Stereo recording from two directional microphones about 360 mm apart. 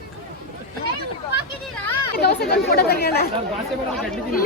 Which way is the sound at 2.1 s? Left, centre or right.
Left.